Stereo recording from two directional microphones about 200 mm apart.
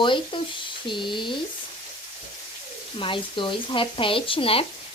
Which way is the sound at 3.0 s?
25° left (ahead or behind).